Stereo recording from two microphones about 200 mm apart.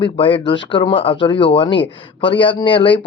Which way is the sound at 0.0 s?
25° left (ahead or behind).